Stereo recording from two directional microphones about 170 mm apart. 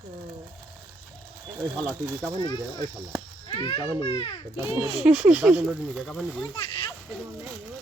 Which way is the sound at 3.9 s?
35° left (ahead or behind).